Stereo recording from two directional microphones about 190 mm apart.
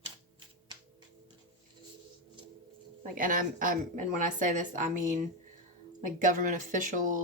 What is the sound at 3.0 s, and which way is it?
Speech, 45° right (ahead or behind).